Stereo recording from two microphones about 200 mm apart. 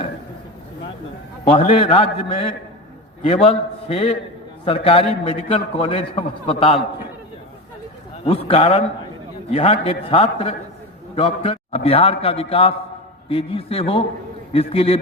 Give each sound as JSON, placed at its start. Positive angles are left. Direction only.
{"t": 1.5, "sound": "a man's voice", "side_deg": 30}
{"t": 3.2, "sound": "a man's voice", "side_deg": 30}
{"t": 8.2, "sound": "a man's voice", "side_deg": 30}